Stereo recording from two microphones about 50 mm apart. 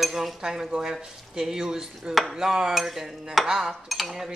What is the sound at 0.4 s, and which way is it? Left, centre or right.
Speech, centre.